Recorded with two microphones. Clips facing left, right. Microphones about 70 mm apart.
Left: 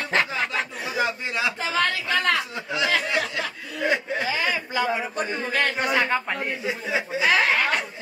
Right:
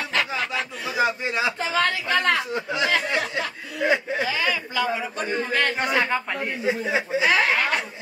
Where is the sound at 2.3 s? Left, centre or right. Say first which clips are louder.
Right 2 dB; right.